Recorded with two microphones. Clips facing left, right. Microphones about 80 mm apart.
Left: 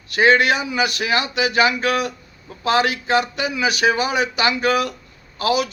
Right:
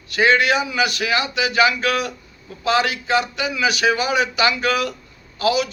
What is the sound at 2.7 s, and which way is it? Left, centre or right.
A man's voice, left.